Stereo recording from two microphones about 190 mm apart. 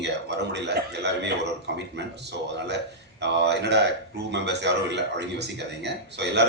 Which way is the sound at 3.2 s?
65° right (ahead or behind).